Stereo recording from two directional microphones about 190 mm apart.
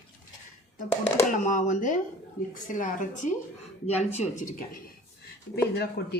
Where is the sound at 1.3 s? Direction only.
40° left (ahead or behind).